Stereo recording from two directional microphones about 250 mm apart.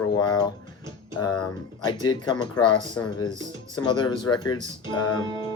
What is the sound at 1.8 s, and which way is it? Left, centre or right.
Speech, centre.